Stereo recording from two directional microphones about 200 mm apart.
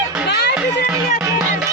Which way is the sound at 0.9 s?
5° right (ahead or behind).